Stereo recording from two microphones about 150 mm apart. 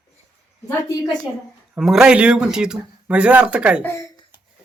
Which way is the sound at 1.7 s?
5° right (ahead or behind).